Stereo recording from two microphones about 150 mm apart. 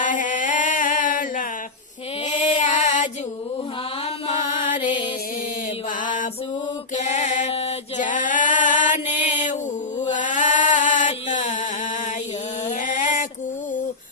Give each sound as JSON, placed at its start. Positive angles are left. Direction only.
{"t": 0.0, "sound": "music", "side_deg": 60}
{"t": 2.2, "sound": "female singing", "side_deg": 55}
{"t": 4.4, "sound": "mantra", "side_deg": 60}
{"t": 6.0, "sound": "music", "side_deg": 60}
{"t": 6.9, "sound": "mantra", "side_deg": 50}
{"t": 8.0, "sound": "female singing", "side_deg": 60}
{"t": 10.0, "sound": "a sound", "side_deg": 55}
{"t": 12.6, "sound": "a sound", "side_deg": 60}